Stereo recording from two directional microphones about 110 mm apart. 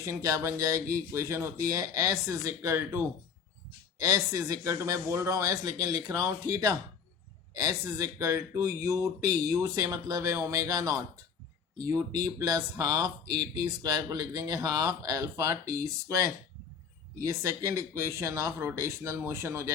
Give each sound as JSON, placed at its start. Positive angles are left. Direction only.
{"t": 0.0, "sound": "speech", "side_deg": -30}
{"t": 4.0, "sound": "speech", "side_deg": -30}